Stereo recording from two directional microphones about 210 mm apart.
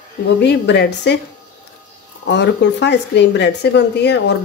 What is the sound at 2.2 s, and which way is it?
Speech, 55° left (ahead or behind).